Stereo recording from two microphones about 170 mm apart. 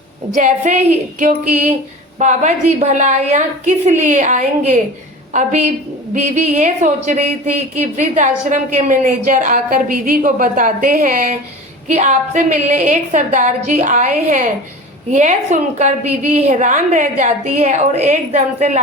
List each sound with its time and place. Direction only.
0.3 s speech: 45° right (ahead or behind)